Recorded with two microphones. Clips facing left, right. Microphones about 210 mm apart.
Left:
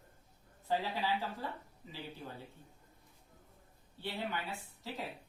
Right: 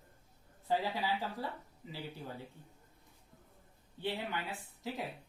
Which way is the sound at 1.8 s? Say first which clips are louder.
Right 4 dB; 15° right (ahead or behind).